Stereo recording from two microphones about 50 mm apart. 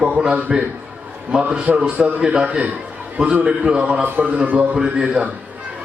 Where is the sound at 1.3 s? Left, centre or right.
Right.